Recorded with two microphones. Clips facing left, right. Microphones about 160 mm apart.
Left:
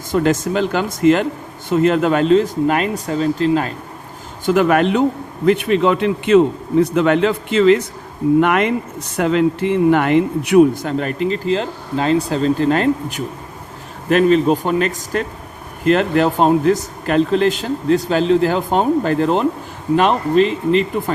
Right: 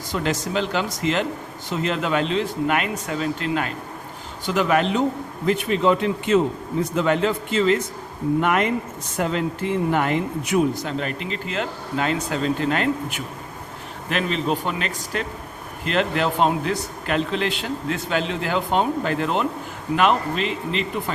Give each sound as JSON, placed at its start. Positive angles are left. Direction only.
{"t": 0.1, "sound": "speech", "side_deg": 50}
{"t": 4.4, "sound": "a man's voice", "side_deg": 55}